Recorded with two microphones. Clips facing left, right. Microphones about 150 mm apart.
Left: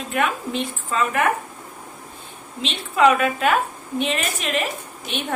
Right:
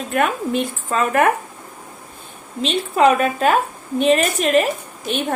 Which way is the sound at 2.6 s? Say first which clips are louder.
Right 3 dB; 40° right (ahead or behind).